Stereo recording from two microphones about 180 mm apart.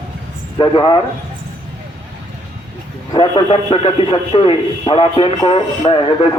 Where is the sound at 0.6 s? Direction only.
25° left (ahead or behind).